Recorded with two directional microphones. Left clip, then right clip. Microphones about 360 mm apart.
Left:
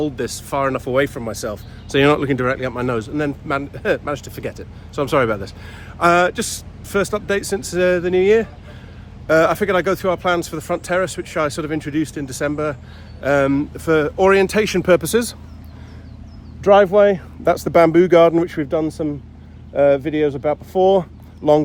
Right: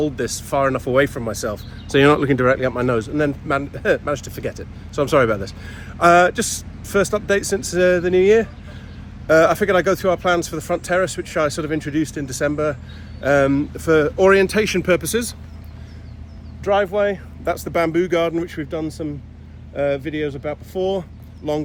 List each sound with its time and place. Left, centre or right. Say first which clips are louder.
0.0 s speech: right 1 dB; centre
16.6 s speech: left 6 dB; left